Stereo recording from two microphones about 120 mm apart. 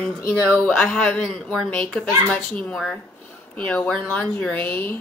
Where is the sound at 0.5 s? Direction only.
10° left (ahead or behind).